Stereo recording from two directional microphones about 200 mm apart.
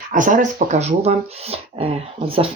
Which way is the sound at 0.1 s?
40° right (ahead or behind).